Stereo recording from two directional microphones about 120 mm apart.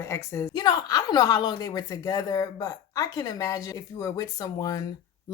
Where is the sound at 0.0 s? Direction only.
20° left (ahead or behind).